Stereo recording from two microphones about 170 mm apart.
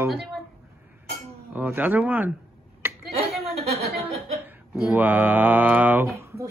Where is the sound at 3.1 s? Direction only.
40° right (ahead or behind).